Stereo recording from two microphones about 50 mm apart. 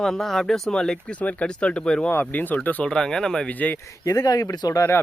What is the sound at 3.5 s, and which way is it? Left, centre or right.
Speech, left.